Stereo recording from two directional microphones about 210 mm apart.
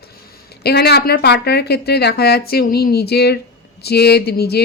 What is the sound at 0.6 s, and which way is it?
A woman's voice, 50° left (ahead or behind).